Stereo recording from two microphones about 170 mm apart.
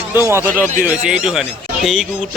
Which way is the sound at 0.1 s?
15° right (ahead or behind).